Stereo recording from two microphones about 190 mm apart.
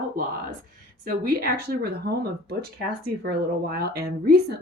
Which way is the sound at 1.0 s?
50° right (ahead or behind).